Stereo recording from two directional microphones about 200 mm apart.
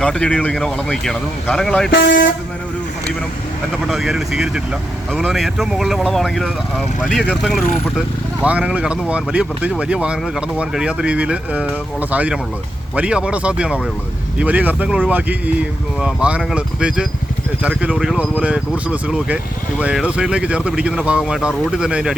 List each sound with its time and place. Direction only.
0.0 s speech: 5° left (ahead or behind)
1.9 s speech: 55° left (ahead or behind)
3.8 s speech: centre (ahead or behind)